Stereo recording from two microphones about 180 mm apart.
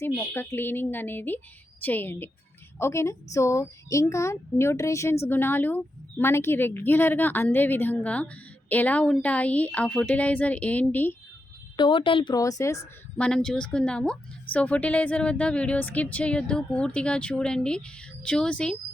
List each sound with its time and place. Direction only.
0.0 s a woman's voice: 10° left (ahead or behind)
11.8 s speech: 30° left (ahead or behind)
13.1 s a woman's voice: 5° left (ahead or behind)